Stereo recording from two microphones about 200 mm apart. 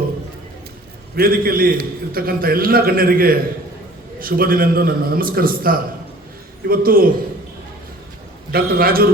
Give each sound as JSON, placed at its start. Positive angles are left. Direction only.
{"t": 1.1, "sound": "a man's voice", "side_deg": -50}
{"t": 8.5, "sound": "a man's voice", "side_deg": -50}